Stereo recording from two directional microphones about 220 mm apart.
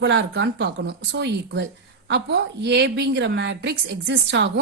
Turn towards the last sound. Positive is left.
turn(degrees=-55)  # may be behind; listen again after turning